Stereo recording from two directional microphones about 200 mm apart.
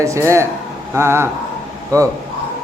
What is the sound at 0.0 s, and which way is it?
Speech, 15° right (ahead or behind).